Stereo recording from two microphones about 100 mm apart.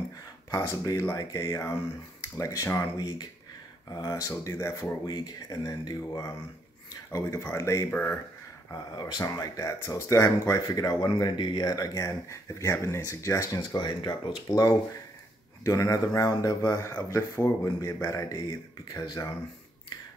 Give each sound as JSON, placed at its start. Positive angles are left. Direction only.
{"t": 0.5, "sound": "speech", "side_deg": 35}
{"t": 3.0, "sound": "speech", "side_deg": 45}
{"t": 5.0, "sound": "speech", "side_deg": 40}
{"t": 7.9, "sound": "speech", "side_deg": 20}
{"t": 8.9, "sound": "speech", "side_deg": 45}
{"t": 13.7, "sound": "speech", "side_deg": 45}
{"t": 14.5, "sound": "speech", "side_deg": 35}